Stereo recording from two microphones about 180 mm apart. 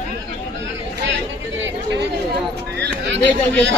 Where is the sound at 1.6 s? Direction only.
80° right.